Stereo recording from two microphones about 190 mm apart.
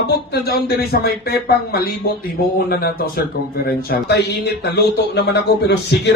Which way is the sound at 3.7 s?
55° left (ahead or behind).